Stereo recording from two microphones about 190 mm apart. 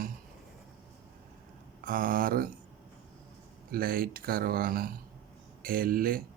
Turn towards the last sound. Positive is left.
turn(degrees=-50)  # may be behind; listen again after turning